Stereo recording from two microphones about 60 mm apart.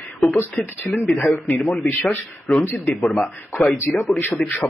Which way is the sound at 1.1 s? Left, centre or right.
Left.